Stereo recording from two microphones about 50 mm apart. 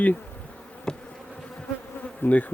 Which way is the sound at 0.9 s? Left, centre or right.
Centre.